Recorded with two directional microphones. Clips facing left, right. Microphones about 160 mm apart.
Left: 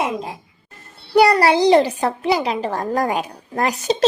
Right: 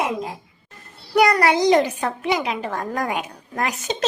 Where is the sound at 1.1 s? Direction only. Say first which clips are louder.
Left 3 dB; 30° left (ahead or behind).